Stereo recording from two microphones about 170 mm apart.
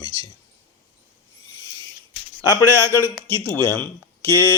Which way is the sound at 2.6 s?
15° left (ahead or behind).